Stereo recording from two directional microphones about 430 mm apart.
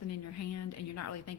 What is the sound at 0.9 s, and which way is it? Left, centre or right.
Speech, left.